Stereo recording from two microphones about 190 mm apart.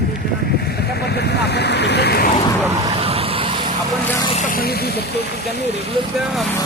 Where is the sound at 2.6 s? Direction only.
15° right (ahead or behind).